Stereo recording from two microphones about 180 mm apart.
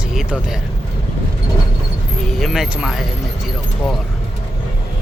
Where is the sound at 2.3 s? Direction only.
Centre (ahead or behind).